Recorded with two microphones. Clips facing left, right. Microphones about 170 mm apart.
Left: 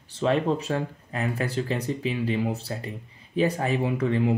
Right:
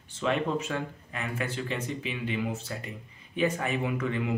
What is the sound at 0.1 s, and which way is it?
Speech, 35° left (ahead or behind).